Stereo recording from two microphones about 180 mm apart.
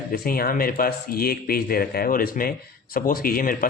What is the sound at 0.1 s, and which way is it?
Speech, 55° left (ahead or behind).